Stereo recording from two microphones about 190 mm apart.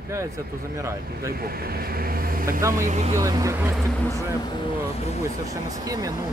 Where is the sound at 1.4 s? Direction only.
55° right (ahead or behind).